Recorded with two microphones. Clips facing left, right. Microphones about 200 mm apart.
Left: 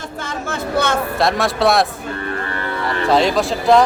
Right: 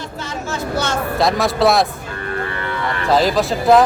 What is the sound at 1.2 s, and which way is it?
Speech, centre (ahead or behind).